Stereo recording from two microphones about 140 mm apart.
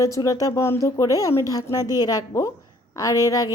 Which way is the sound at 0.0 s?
25° left (ahead or behind).